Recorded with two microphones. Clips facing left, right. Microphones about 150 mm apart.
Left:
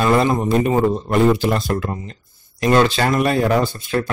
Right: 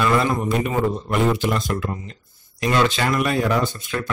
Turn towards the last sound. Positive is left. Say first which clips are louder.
# left 4 dB
turn(degrees=35)  # may be behind; listen again after turning